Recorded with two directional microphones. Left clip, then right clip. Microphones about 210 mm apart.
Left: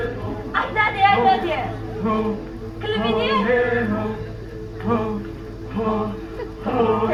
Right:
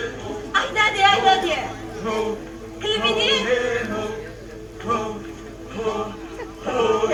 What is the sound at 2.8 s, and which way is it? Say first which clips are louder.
Music: right 1 dB; 45° right (ahead or behind).